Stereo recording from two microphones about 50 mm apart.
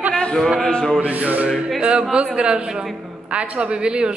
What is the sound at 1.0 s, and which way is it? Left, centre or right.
Music, right.